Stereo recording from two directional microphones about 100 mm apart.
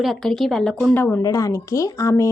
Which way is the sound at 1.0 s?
20° left (ahead or behind).